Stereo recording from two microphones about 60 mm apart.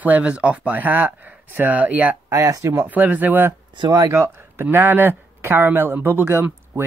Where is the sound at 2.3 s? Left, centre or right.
Right.